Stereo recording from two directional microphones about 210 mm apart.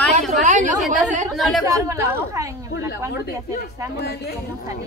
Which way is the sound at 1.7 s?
15° right (ahead or behind).